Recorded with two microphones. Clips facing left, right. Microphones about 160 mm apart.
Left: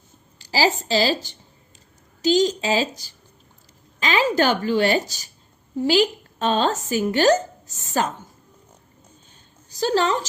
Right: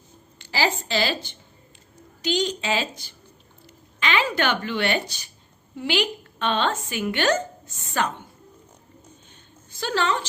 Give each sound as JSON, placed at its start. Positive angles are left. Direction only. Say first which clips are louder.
{"t": 0.3, "sound": "a woman's voice", "louder": "left 4 dB", "side_deg": 35}
{"t": 9.6, "sound": "a woman's voice", "louder": "left 4 dB", "side_deg": 40}